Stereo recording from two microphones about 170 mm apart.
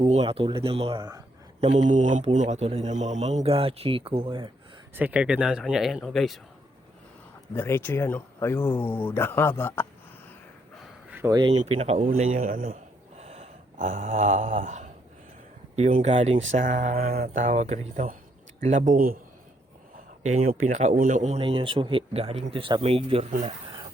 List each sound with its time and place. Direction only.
0.0 s a man's voice: 35° right (ahead or behind)
0.9 s speech: 20° right (ahead or behind)
1.6 s a man's voice: 40° right (ahead or behind); by 4.5 s 25° right (ahead or behind)
4.9 s speech: 10° right (ahead or behind)
7.5 s speech: 10° left (ahead or behind)
11.3 s speech: 25° right (ahead or behind)
11.6 s a man's voice: 35° right (ahead or behind)
12.2 s speech: 50° right (ahead or behind)
13.1 s snort: 40° right (ahead or behind)
13.7 s speech: 50° right (ahead or behind)
20.5 s a man's voice: 50° right (ahead or behind); by 23.3 s 35° right (ahead or behind)